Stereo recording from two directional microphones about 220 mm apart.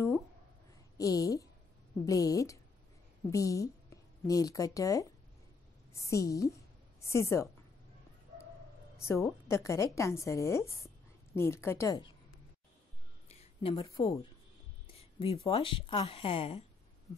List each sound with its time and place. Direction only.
0.9 s a woman's voice: 15° left (ahead or behind)
9.0 s a woman's voice: 10° left (ahead or behind)
13.3 s a sound: 25° left (ahead or behind)
13.8 s a woman's voice: 15° left (ahead or behind)
15.0 s speech: 25° left (ahead or behind)